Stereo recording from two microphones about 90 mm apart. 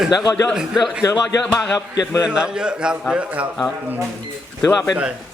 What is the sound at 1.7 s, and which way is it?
Speech, 40° left (ahead or behind).